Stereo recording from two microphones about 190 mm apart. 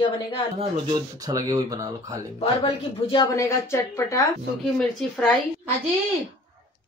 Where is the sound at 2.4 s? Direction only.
30° left (ahead or behind); by 4.3 s 15° left (ahead or behind).